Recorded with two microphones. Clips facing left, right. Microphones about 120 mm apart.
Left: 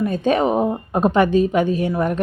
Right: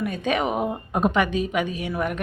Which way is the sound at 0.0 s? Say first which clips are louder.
Left 6 dB; 35° left (ahead or behind).